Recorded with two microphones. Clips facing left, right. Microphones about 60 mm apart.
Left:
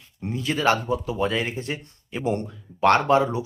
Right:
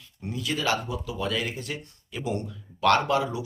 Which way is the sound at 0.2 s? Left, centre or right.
Left.